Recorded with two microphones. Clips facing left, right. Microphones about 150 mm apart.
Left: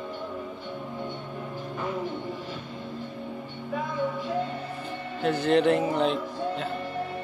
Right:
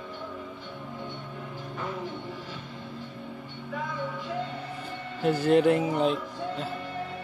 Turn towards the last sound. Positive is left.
turn(degrees=-10)  # may be behind; listen again after turning